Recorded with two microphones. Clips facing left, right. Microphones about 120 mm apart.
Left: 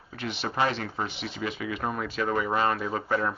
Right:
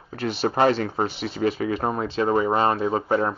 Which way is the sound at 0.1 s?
40° right (ahead or behind).